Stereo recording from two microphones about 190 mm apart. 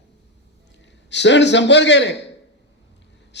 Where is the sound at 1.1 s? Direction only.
65° left (ahead or behind).